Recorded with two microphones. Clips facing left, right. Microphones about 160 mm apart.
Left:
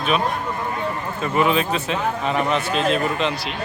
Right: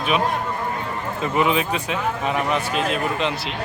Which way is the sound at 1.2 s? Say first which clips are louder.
Left 1 dB; 15° right (ahead or behind).